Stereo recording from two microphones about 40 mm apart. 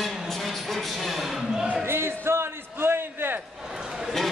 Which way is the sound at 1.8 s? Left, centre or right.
Right.